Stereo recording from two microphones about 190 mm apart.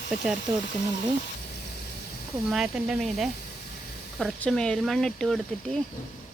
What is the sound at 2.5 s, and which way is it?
Speech, 5° right (ahead or behind).